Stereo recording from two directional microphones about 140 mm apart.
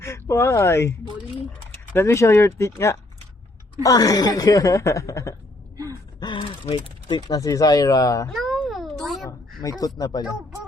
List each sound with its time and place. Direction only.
0.0 s a woman's voice: 20° left (ahead or behind)
6.1 s speech: 35° left (ahead or behind)
8.3 s a sound: centre (ahead or behind)
9.6 s a woman's voice: 25° left (ahead or behind)